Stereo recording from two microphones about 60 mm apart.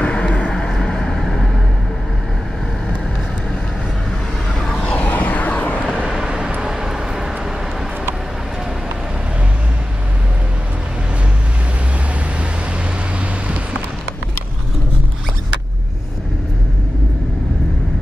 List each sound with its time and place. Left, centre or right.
0.0 s vehicle: centre
4.9 s a sound: left
6.0 s vehicle: centre